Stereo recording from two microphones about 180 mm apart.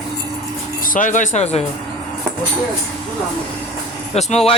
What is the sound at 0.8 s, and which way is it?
Speech, 50° left (ahead or behind).